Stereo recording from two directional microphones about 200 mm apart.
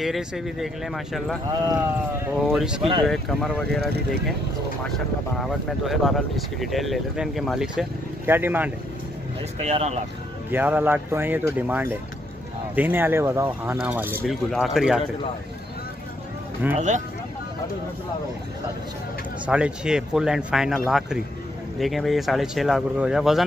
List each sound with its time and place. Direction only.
0.0 s speech: centre (ahead or behind)
1.5 s speech: 15° right (ahead or behind)
2.4 s speech: 5° right (ahead or behind)
5.4 s speech: centre (ahead or behind)
9.6 s speech: 35° right (ahead or behind)
10.5 s speech: 10° right (ahead or behind)
16.6 s speech: 10° right (ahead or behind)
19.4 s speech: 5° right (ahead or behind)